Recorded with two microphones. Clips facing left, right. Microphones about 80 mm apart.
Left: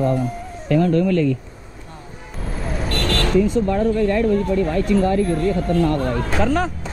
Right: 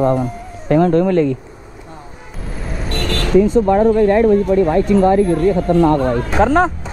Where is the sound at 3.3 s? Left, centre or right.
Right.